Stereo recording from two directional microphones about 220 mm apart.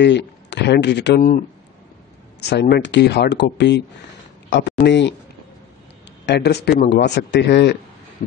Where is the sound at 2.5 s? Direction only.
50° left (ahead or behind).